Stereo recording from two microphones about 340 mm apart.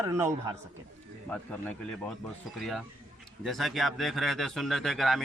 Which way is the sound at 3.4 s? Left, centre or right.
Centre.